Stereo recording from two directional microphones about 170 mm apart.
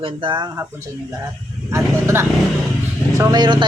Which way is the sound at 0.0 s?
30° right (ahead or behind).